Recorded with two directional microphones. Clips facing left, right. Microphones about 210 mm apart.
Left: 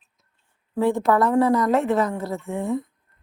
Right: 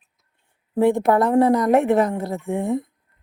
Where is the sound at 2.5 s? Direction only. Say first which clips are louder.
Right 6 dB; 60° right (ahead or behind).